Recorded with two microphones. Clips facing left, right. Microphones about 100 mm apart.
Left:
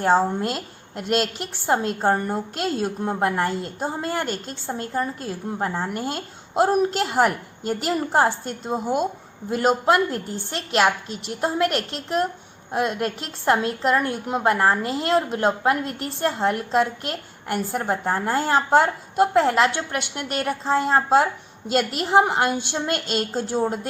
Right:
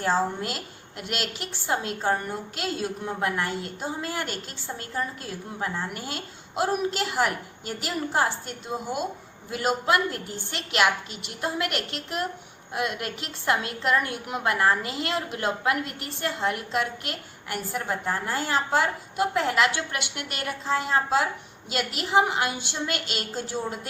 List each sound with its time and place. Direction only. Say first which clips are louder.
0.1 s a woman's voice: left 6 dB; 30° left (ahead or behind)